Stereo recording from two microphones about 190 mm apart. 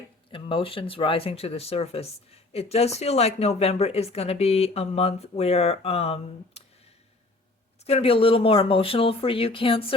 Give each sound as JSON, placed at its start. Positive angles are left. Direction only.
{"t": 0.3, "sound": "speech", "side_deg": 25}
{"t": 7.9, "sound": "speech", "side_deg": 30}